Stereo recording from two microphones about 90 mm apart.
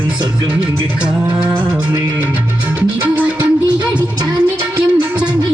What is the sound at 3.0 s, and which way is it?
Music, 20° right (ahead or behind).